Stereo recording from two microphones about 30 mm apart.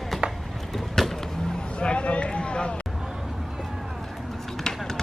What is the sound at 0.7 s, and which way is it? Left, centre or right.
Vehicle, centre.